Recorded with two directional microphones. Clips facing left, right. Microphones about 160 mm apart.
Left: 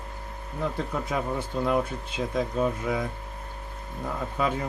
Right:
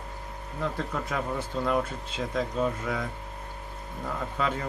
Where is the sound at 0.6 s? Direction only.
15° left (ahead or behind).